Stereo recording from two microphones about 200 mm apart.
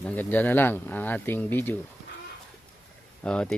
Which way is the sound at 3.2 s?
5° left (ahead or behind).